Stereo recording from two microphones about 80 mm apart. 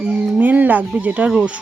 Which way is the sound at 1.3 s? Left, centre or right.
Centre.